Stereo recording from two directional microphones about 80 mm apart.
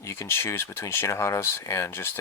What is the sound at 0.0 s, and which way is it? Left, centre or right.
Speech, left.